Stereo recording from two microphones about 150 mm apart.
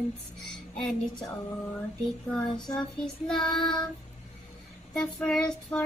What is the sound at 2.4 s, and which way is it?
Child singing, 30° left (ahead or behind).